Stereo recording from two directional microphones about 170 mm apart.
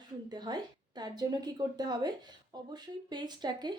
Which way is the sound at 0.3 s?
25° right (ahead or behind).